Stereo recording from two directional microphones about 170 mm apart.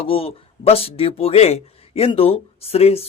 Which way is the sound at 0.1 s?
35° left (ahead or behind).